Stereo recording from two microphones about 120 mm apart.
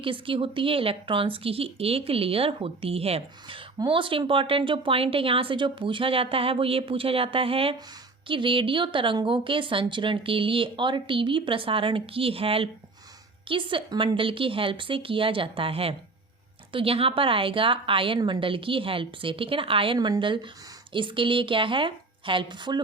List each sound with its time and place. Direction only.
0.0 s a woman's voice: 45° right (ahead or behind)